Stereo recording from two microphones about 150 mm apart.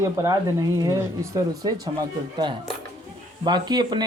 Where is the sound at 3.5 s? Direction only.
30° right (ahead or behind).